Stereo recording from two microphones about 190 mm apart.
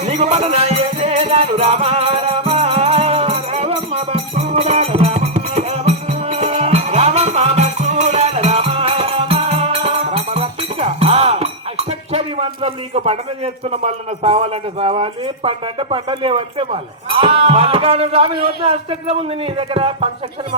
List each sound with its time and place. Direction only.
0.0 s music: 35° right (ahead or behind)